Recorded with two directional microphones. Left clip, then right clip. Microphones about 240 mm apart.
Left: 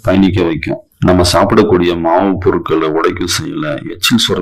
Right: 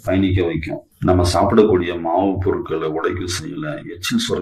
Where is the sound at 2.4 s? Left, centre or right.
Left.